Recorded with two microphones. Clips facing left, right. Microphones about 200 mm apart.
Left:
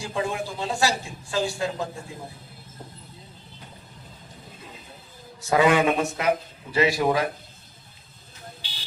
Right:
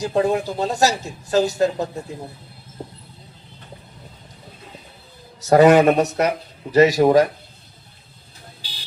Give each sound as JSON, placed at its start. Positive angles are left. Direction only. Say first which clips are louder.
{"t": 0.0, "sound": "a man's voice", "louder": "right 9 dB", "side_deg": -40}
{"t": 2.8, "sound": "vehicle", "louder": "right 8 dB", "side_deg": -40}
{"t": 5.4, "sound": "a man's voice", "louder": "right 8 dB", "side_deg": -40}